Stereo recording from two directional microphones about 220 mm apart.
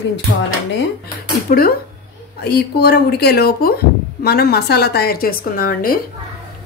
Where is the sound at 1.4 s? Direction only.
40° left (ahead or behind).